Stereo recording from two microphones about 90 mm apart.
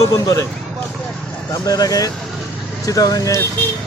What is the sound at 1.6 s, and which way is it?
Speech, 45° left (ahead or behind).